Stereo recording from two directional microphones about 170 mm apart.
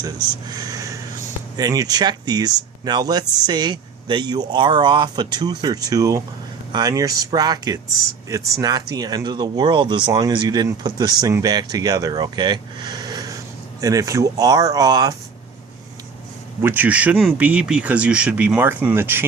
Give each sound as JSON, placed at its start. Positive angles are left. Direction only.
{"t": 0.4, "sound": "speech", "side_deg": -20}
{"t": 16.6, "sound": "speech", "side_deg": -10}